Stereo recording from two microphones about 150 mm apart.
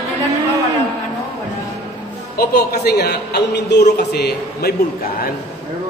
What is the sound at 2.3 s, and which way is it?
A man's voice, 90° left.